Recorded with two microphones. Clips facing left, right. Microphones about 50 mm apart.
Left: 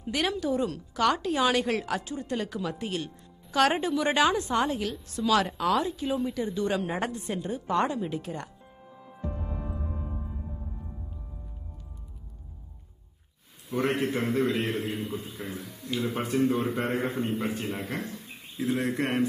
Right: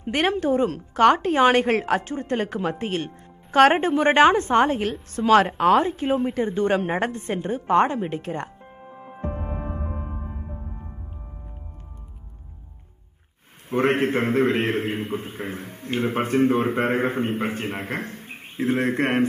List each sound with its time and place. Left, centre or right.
0.0 s a woman's voice: right
13.7 s a man's voice: right